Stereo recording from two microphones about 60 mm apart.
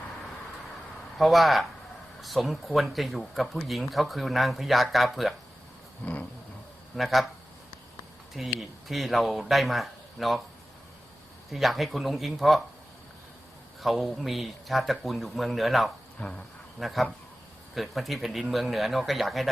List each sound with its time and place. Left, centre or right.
1.2 s speech: centre
6.0 s roaring cats: left
6.9 s speech: centre
8.5 s speech: centre
11.5 s speech: centre
13.8 s speech: centre
16.2 s roaring cats: left
16.8 s speech: centre